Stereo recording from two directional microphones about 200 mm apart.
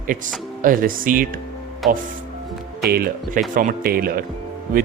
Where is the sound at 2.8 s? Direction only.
50° right (ahead or behind).